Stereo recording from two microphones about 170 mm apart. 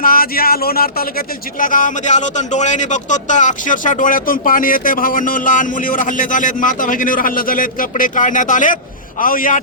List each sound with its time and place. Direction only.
0.0 s speech: 60° left (ahead or behind)